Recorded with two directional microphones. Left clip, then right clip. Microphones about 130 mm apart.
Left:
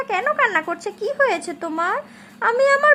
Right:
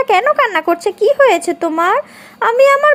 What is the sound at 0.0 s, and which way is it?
Speech, 45° right (ahead or behind).